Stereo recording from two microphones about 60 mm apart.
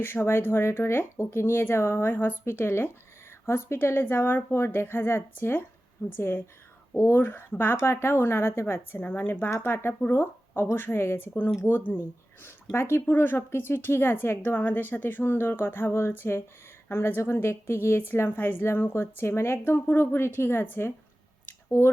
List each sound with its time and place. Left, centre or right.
0.0 s speech: left
12.4 s a woman's voice: left